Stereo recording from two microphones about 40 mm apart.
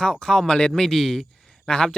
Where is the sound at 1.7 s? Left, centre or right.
Left.